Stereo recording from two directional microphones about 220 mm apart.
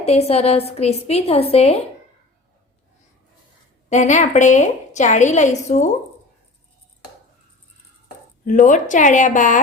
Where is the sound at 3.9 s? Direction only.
35° left (ahead or behind).